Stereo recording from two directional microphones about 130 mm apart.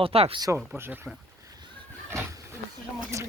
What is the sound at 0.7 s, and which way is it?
Speech, 15° right (ahead or behind).